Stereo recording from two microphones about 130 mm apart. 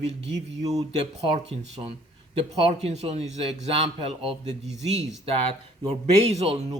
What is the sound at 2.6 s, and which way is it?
Speech, 50° right (ahead or behind).